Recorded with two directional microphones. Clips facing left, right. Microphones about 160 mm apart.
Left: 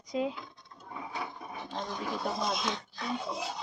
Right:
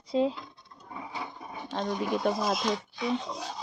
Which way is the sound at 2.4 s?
5° right (ahead or behind).